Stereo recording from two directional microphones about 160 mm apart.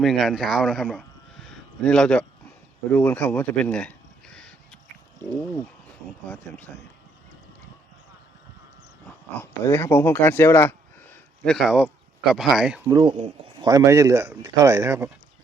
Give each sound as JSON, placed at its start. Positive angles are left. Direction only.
{"t": 0.0, "sound": "speech", "side_deg": 0}
{"t": 2.9, "sound": "a sound", "side_deg": 10}
{"t": 6.2, "sound": "speech", "side_deg": 10}
{"t": 9.4, "sound": "speech", "side_deg": 15}
{"t": 11.4, "sound": "speech", "side_deg": 0}
{"t": 12.9, "sound": "speech", "side_deg": -30}
{"t": 13.7, "sound": "speech", "side_deg": -20}